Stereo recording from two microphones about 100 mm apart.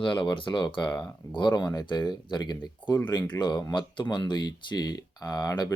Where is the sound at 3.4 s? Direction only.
45° left (ahead or behind).